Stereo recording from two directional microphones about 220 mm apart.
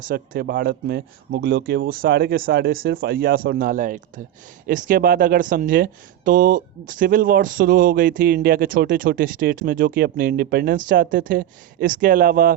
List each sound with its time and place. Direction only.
0.1 s speech: 40° right (ahead or behind)